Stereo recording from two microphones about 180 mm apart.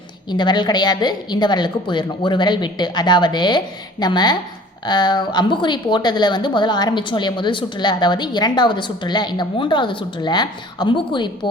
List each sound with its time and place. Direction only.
0.3 s a woman's voice: 25° left (ahead or behind)